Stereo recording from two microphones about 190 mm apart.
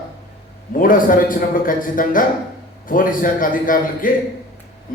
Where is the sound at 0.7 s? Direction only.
45° left (ahead or behind).